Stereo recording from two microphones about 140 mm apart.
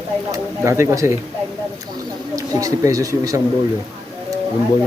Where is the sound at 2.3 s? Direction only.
25° right (ahead or behind).